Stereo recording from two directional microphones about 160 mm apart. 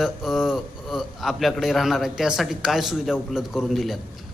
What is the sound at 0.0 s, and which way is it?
A man's voice, centre (ahead or behind).